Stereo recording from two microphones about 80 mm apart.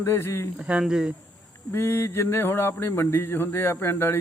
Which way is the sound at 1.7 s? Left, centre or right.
Left.